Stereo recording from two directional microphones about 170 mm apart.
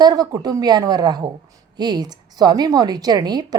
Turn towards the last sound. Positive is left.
turn(degrees=-25)  # may be behind; listen again after turning